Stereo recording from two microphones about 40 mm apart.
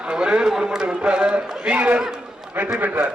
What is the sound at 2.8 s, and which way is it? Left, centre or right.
Speech, right.